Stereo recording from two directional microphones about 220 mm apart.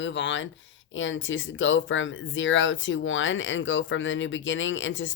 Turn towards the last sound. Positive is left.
turn(degrees=60)  # may be behind; listen again after turning